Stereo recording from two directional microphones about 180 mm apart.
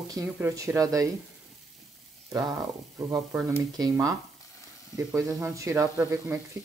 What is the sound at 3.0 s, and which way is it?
Speech, 15° right (ahead or behind).